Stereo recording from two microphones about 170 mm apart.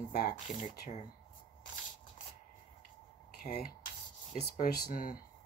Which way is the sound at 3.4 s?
55° left (ahead or behind).